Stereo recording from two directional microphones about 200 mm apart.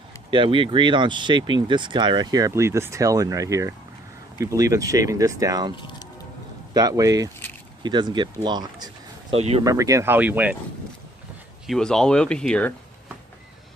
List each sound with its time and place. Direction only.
0.3 s speech: 25° right (ahead or behind)
6.7 s speech: 15° right (ahead or behind)
9.6 s speech: 15° right (ahead or behind)
11.6 s speech: centre (ahead or behind)